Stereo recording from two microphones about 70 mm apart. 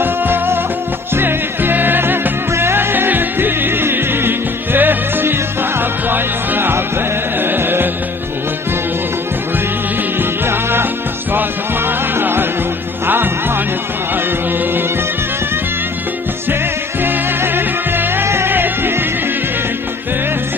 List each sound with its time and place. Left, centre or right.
0.0 s music: right
10.4 s music: right
17.0 s music: right